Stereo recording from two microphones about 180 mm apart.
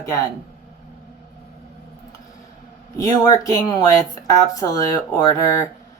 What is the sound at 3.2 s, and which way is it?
Speech, 20° left (ahead or behind).